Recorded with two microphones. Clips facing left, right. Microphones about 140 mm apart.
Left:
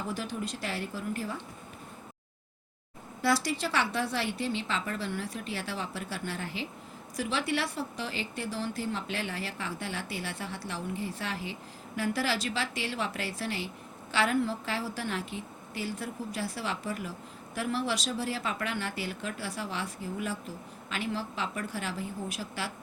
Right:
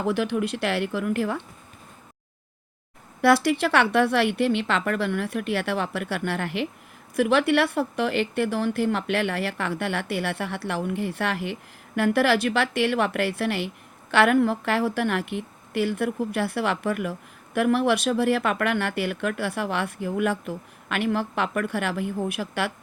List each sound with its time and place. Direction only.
0.0 s speech: 70° right (ahead or behind)
3.2 s a woman's voice: 60° right (ahead or behind)